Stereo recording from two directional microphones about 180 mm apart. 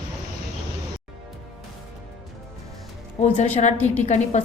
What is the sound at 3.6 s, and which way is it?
Speech, 40° left (ahead or behind).